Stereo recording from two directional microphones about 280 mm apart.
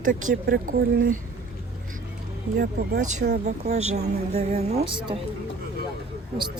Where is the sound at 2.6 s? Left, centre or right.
Right.